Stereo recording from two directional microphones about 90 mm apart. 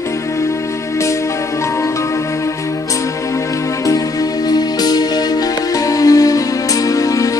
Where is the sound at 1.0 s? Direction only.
35° left (ahead or behind).